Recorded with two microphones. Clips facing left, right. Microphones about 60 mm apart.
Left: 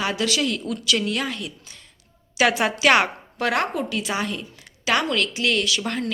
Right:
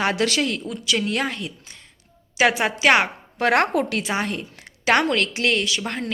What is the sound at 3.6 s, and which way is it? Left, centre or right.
Speech, right.